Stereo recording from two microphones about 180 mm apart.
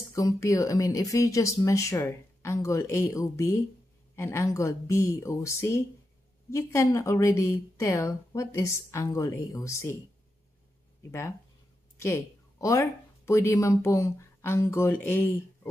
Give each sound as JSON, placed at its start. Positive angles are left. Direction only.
{"t": 0.1, "sound": "speech", "side_deg": 15}
{"t": 11.0, "sound": "speech", "side_deg": 15}